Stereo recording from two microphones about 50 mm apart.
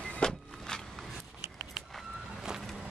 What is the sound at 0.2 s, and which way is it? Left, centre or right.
Vehicle, centre.